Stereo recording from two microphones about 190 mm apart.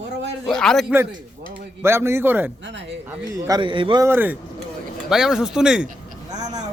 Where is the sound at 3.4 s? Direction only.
20° right (ahead or behind).